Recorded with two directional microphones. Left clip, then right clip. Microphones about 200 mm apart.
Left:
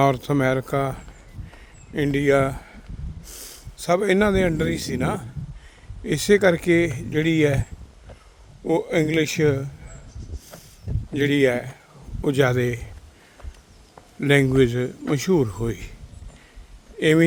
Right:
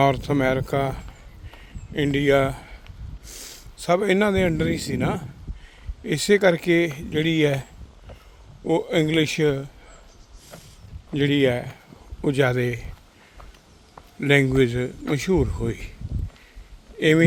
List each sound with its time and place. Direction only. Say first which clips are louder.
0.0 s speech: even; 10° left (ahead or behind)
1.5 s a sound: right 3 dB; 10° left (ahead or behind)
3.2 s speech: right 2 dB; 10° left (ahead or behind)
11.1 s speech: left 1 dB; 20° left (ahead or behind)
14.2 s speech: left 1 dB; 10° left (ahead or behind)
17.0 s speech: even; 10° left (ahead or behind)